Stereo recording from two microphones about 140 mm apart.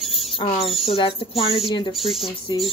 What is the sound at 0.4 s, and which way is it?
Speech, 45° left (ahead or behind).